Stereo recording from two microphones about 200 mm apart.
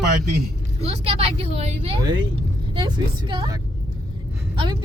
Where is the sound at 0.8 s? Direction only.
30° right (ahead or behind).